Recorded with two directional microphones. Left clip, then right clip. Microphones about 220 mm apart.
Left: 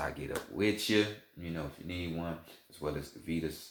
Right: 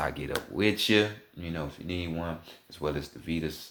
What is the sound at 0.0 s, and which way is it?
Speech, 40° right (ahead or behind).